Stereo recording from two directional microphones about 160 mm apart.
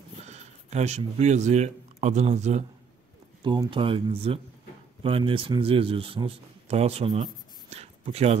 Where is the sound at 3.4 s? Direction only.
30° right (ahead or behind).